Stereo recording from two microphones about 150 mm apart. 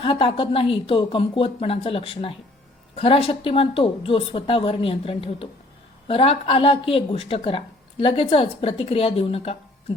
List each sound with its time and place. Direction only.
0.0 s a woman's voice: 35° left (ahead or behind)